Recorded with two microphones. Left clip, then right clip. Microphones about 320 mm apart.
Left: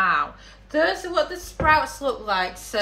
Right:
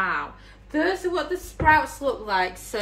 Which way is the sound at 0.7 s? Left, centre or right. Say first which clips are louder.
Left 3 dB; left.